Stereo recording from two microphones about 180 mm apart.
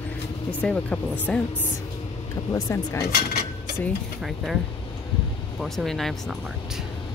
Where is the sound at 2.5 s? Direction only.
15° left (ahead or behind).